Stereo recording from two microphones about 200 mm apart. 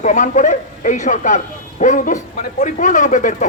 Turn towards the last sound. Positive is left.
turn(degrees=40)  # may be behind; listen again after turning